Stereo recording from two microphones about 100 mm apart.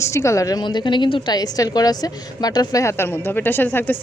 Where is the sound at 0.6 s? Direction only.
50° left (ahead or behind).